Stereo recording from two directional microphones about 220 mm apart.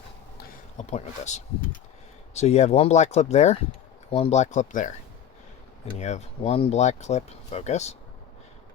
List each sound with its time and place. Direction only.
0.8 s speech: 30° left (ahead or behind)